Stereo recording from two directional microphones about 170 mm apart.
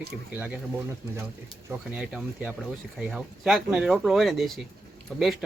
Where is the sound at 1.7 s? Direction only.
5° right (ahead or behind).